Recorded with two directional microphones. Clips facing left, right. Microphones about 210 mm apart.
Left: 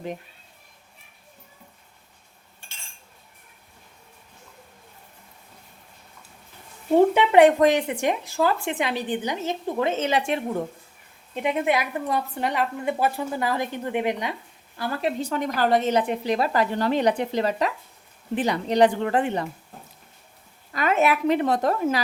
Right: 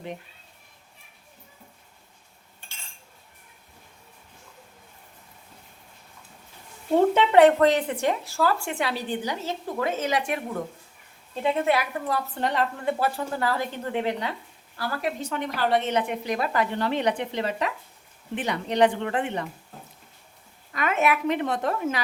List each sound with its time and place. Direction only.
7.1 s speech: 15° left (ahead or behind)
11.4 s a woman's voice: 15° left (ahead or behind)
15.2 s a woman's voice: 40° left (ahead or behind)
20.7 s a woman's voice: 35° left (ahead or behind)